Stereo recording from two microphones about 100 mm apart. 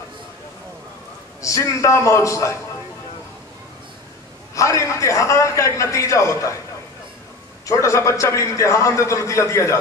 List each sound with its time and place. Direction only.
1.4 s a man's voice: 30° left (ahead or behind)
4.6 s a man's voice: 30° left (ahead or behind)
7.6 s a man's voice: 30° left (ahead or behind)